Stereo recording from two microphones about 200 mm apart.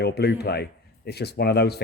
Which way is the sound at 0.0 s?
55° left (ahead or behind).